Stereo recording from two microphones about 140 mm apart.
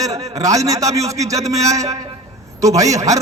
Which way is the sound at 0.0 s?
25° right (ahead or behind).